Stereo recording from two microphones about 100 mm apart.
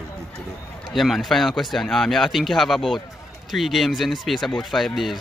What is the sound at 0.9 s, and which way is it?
Speech, centre (ahead or behind).